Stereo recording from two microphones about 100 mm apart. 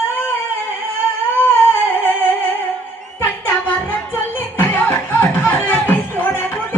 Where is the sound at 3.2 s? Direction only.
20° left (ahead or behind).